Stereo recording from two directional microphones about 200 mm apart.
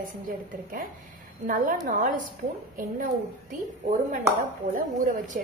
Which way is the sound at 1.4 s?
45° right (ahead or behind).